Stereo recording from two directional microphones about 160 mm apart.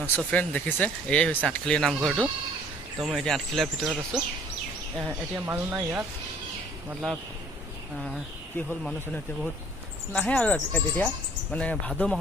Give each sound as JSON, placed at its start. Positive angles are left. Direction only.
{"t": 0.2, "sound": "speech", "side_deg": 10}
{"t": 7.9, "sound": "speech", "side_deg": 5}